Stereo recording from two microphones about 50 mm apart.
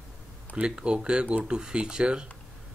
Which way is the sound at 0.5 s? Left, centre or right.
Centre.